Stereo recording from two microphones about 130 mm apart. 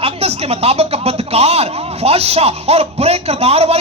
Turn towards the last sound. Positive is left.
turn(degrees=-50)  # may be behind; listen again after turning